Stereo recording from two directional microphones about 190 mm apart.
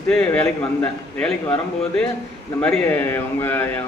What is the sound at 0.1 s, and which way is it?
A man's voice, 10° left (ahead or behind).